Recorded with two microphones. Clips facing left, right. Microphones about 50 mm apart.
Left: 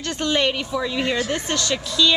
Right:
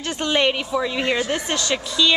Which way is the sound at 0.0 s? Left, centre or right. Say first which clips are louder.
Right 1 dB; centre.